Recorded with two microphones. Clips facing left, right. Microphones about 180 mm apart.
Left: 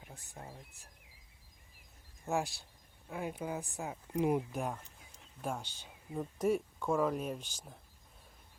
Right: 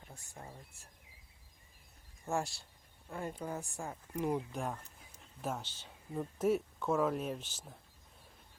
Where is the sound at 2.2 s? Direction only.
Centre (ahead or behind).